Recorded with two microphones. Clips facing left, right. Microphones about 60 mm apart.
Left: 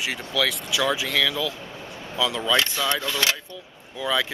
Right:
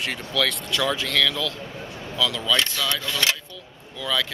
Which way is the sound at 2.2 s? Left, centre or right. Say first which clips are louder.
Left 1 dB; left.